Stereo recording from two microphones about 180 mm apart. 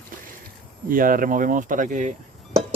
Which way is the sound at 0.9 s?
50° right (ahead or behind).